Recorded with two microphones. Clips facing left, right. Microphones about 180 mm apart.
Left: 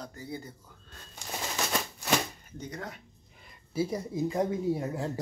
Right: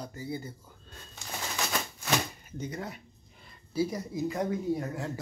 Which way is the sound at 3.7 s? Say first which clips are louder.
Even; 25° left (ahead or behind).